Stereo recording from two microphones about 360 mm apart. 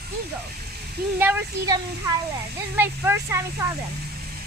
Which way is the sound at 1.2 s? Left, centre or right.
Centre.